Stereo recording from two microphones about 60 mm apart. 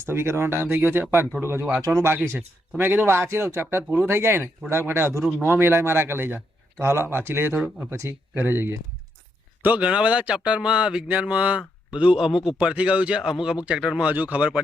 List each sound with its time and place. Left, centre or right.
0.0 s a man's voice: right
1.8 s speech: right
2.2 s a man's voice: right
3.1 s a man's voice: right
9.6 s speech: right
13.2 s speech: centre
14.1 s speech: right